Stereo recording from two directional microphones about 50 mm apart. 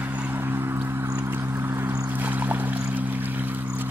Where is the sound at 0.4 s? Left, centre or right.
Right.